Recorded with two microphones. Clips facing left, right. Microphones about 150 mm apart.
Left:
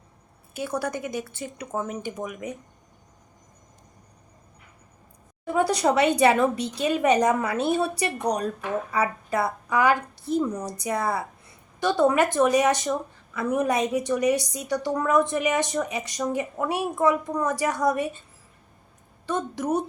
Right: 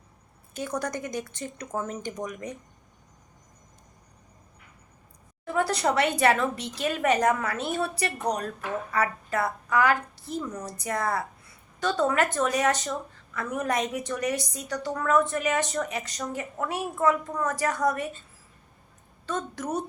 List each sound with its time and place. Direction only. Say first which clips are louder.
0.5 s a woman's voice: left 2 dB; 10° left (ahead or behind)
5.5 s a woman's voice: left 3 dB; 15° left (ahead or behind)
19.5 s a woman's voice: left 7 dB; 10° left (ahead or behind)